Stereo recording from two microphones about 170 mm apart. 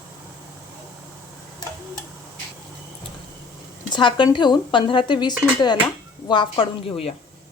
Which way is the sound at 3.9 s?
25° left (ahead or behind).